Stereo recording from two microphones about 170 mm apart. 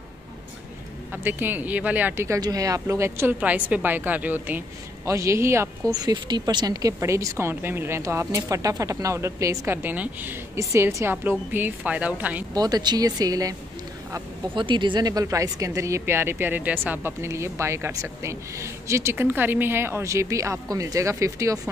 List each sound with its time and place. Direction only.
1.1 s speech: 10° right (ahead or behind)
12.5 s speech: 25° right (ahead or behind)